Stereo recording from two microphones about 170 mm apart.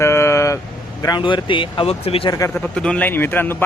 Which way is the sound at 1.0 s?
25° left (ahead or behind).